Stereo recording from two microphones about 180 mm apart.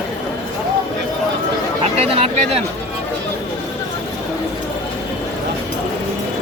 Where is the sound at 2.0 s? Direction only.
35° right (ahead or behind).